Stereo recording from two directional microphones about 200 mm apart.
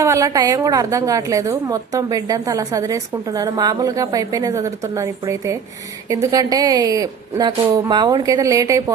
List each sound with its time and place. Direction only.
0.0 s a woman's voice: 15° right (ahead or behind)